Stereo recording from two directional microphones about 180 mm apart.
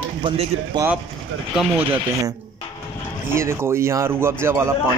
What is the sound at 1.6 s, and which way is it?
A man's voice, 10° right (ahead or behind).